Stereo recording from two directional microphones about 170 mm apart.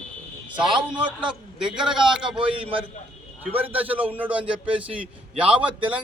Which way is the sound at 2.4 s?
30° right (ahead or behind).